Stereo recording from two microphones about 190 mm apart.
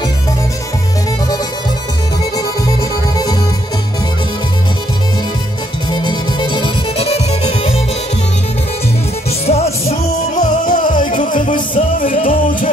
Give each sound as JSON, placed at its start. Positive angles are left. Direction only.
{"t": 5.9, "sound": "music", "side_deg": 20}
{"t": 9.5, "sound": "music", "side_deg": 30}
{"t": 11.0, "sound": "music", "side_deg": 45}